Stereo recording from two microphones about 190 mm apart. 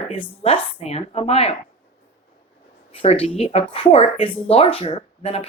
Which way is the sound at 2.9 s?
30° left (ahead or behind).